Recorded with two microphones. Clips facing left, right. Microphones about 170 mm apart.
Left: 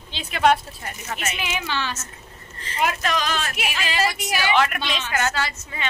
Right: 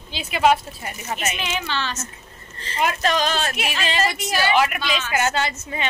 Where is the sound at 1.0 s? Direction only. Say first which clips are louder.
Right 3 dB; 20° right (ahead or behind).